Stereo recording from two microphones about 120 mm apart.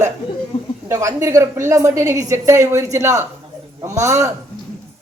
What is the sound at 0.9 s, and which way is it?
A woman's voice, 25° right (ahead or behind).